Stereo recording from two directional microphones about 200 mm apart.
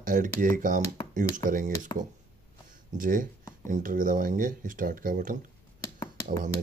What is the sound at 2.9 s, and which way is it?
Speech, 45° right (ahead or behind).